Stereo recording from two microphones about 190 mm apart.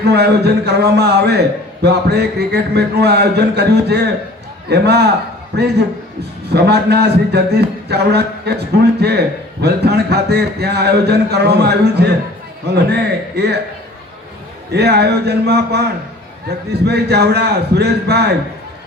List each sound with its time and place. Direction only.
0.0 s a man's voice: 60° right (ahead or behind)
14.7 s a man's voice: 60° right (ahead or behind)